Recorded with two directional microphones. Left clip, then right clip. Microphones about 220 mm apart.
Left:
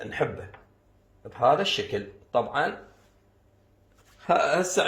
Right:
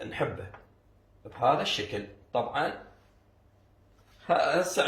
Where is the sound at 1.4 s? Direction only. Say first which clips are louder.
Left 4 dB; 45° left (ahead or behind).